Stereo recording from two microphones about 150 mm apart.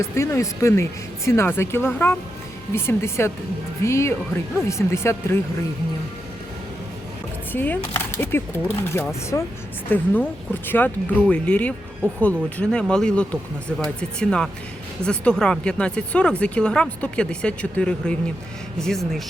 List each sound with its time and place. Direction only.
0.0 s speech: 20° left (ahead or behind)
7.5 s speech: 10° left (ahead or behind)